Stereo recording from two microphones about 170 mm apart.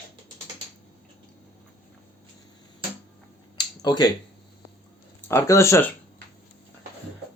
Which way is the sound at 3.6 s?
25° left (ahead or behind).